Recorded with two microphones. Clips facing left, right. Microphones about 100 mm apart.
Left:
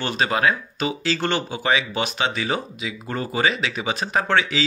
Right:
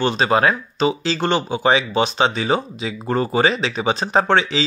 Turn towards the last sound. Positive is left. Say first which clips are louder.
# right 4 dB
turn(degrees=-30)  # may be behind; listen again after turning